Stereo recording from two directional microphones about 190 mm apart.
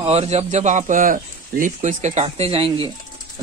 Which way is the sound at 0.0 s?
30° right (ahead or behind).